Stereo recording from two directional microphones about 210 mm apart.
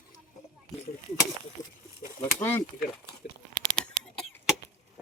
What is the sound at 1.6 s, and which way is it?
Speech, 15° left (ahead or behind).